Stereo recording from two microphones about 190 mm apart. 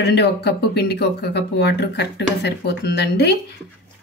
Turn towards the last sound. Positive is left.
turn(degrees=60)  # may be behind; listen again after turning